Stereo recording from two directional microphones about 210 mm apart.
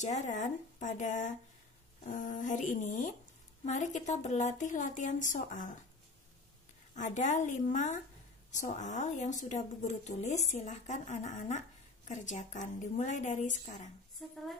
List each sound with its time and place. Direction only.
0.0 s a woman's voice: 35° left (ahead or behind)
7.0 s a woman's voice: 35° left (ahead or behind)
14.2 s speech: centre (ahead or behind)